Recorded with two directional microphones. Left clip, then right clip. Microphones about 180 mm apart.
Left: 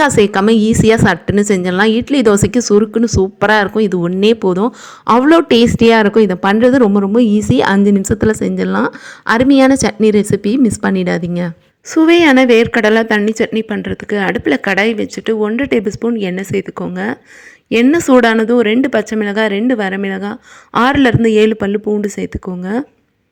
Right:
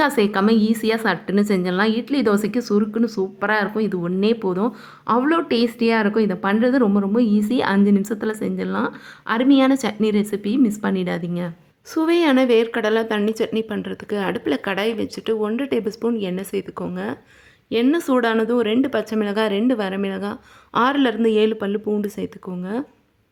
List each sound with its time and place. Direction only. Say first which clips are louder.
0.0 s a woman's voice: left 8 dB; 30° left (ahead or behind)